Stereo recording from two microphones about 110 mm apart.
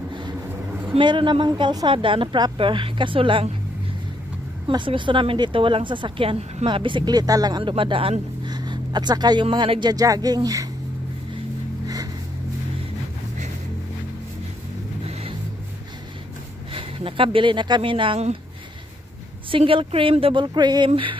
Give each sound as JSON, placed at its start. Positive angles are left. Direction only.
{"t": 0.9, "sound": "speech", "side_deg": -45}
{"t": 4.6, "sound": "speech", "side_deg": -45}
{"t": 7.7, "sound": "speech", "side_deg": -55}
{"t": 8.5, "sound": "speech", "side_deg": -40}
{"t": 16.7, "sound": "speech", "side_deg": -55}
{"t": 19.5, "sound": "speech", "side_deg": -50}
{"t": 20.9, "sound": "speech", "side_deg": -50}